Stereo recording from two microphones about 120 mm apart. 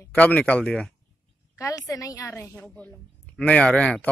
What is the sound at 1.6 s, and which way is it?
A woman's voice, 25° left (ahead or behind).